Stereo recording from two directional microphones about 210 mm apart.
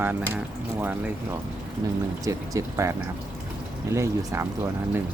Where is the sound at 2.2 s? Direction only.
15° right (ahead or behind).